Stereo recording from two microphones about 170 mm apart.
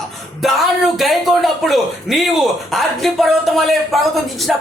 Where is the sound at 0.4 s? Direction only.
Centre (ahead or behind).